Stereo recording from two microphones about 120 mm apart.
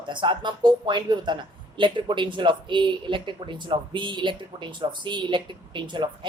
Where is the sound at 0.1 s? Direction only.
40° right (ahead or behind).